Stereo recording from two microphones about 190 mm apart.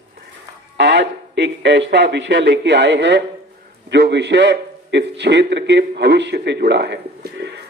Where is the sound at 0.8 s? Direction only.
65° right (ahead or behind).